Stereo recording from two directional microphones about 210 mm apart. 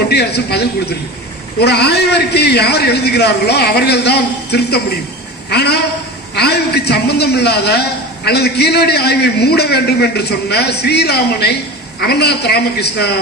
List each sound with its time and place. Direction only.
0.1 s a man's voice: 50° left (ahead or behind)